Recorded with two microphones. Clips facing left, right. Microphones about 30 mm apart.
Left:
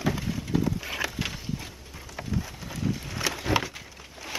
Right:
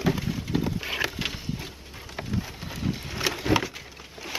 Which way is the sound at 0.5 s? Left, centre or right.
Right.